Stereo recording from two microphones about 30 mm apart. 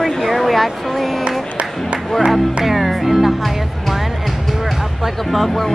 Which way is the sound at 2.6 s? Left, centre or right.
Centre.